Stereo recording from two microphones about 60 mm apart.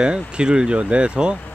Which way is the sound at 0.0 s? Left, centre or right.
Centre.